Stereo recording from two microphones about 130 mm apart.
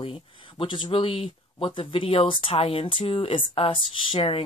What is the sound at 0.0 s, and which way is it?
Speech, 45° left (ahead or behind).